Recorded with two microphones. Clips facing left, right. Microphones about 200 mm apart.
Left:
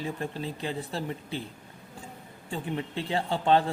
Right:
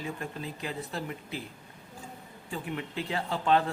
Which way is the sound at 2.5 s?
30° left (ahead or behind).